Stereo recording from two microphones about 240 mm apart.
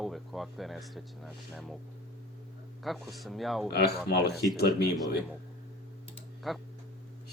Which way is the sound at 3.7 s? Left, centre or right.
Left.